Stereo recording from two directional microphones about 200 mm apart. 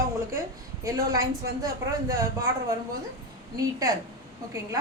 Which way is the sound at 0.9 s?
15° right (ahead or behind).